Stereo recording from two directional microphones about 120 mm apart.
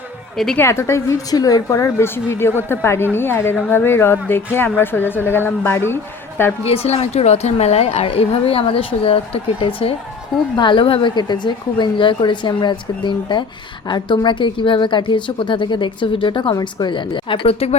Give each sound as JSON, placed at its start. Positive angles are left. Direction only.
{"t": 0.5, "sound": "a woman's voice", "side_deg": 20}
{"t": 6.7, "sound": "a woman's voice", "side_deg": 60}
{"t": 11.1, "sound": "a woman's voice", "side_deg": 35}